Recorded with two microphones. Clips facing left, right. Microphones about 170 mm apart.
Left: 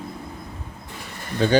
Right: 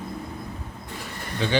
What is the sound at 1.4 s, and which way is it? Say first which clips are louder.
Speech: left 6 dB; 45° left (ahead or behind).